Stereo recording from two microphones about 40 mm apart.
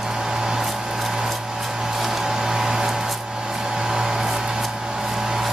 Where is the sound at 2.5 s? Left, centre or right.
Centre.